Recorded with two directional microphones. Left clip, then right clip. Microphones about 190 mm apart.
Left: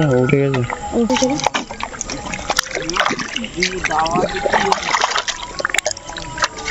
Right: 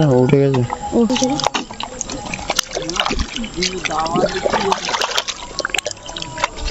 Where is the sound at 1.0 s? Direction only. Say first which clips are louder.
Left 4 dB; 45° right (ahead or behind).